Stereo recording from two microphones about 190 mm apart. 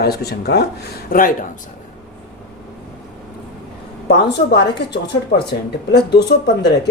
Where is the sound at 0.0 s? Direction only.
55° left (ahead or behind).